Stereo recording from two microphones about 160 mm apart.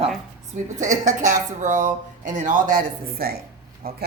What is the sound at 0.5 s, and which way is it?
Speech, 50° right (ahead or behind).